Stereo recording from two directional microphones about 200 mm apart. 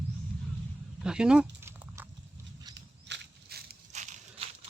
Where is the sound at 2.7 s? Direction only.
60° right (ahead or behind).